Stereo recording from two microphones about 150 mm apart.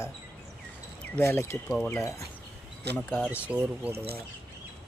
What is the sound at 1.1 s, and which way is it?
Speech, 15° left (ahead or behind).